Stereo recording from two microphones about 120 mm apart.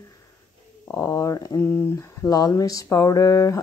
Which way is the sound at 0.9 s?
25° left (ahead or behind).